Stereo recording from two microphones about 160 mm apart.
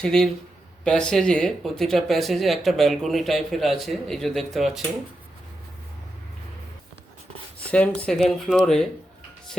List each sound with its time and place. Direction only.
0.0 s speech: 5° left (ahead or behind)
7.6 s speech: 10° left (ahead or behind)